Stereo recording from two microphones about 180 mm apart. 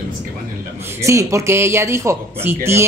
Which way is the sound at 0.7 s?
15° right (ahead or behind).